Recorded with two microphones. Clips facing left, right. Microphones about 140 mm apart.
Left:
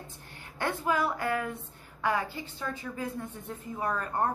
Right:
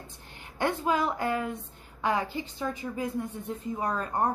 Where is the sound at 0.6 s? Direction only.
20° right (ahead or behind).